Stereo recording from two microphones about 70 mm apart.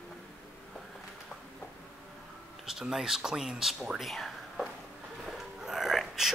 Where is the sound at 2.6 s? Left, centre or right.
Centre.